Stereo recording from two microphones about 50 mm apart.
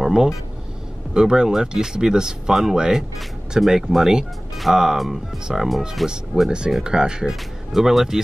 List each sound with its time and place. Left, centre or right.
0.0 s a sound: centre
1.1 s speech: centre
6.8 s speech: centre